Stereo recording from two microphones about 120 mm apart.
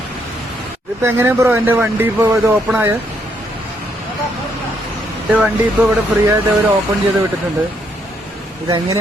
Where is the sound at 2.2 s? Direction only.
25° right (ahead or behind).